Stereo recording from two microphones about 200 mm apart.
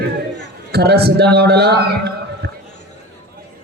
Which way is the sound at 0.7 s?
55° right (ahead or behind).